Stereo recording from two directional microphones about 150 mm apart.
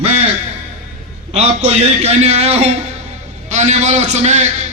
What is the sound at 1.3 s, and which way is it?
A man's voice, 40° right (ahead or behind).